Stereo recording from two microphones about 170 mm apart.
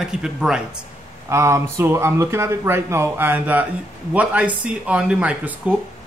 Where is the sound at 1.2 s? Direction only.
15° right (ahead or behind).